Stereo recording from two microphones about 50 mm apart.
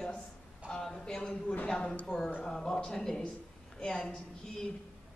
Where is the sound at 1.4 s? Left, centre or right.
Left.